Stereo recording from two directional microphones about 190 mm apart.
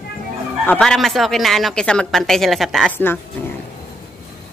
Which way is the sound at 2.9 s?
10° left (ahead or behind).